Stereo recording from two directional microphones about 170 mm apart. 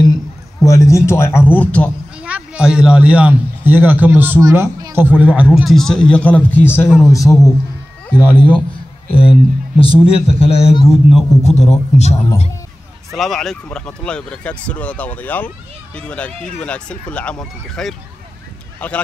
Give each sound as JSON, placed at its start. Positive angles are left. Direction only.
{"t": 0.6, "sound": "speech", "side_deg": 20}
{"t": 2.1, "sound": "a man's voice", "side_deg": -5}
{"t": 9.8, "sound": "a man's voice", "side_deg": 35}
{"t": 10.9, "sound": "a man's voice", "side_deg": 0}
{"t": 11.4, "sound": "a man's voice", "side_deg": 40}
{"t": 13.1, "sound": "speech", "side_deg": 0}